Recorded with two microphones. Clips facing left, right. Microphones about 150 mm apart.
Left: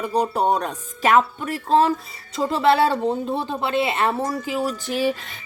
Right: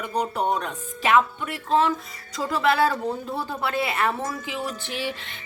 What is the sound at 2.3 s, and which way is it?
A woman's voice, 25° left (ahead or behind).